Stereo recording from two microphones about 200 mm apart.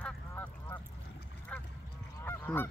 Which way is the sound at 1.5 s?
5° left (ahead or behind).